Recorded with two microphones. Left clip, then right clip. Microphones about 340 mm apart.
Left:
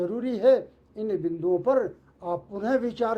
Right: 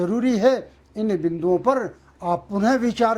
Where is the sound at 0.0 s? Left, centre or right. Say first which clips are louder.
Right 4 dB; right.